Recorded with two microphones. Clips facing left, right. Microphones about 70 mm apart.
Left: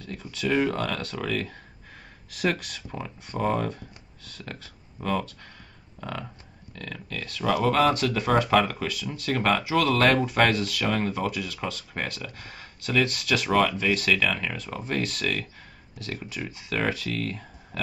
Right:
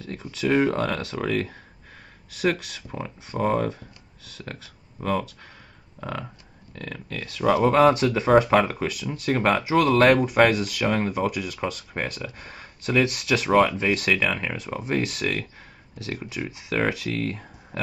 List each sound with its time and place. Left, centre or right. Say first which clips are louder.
0.1 s speech: right 3 dB; right
2.3 s speech: right 3 dB; centre
5.0 s speech: right 2 dB; centre
5.9 s speech: right 2 dB; centre